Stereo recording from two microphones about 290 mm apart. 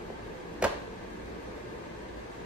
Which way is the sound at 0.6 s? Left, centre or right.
Centre.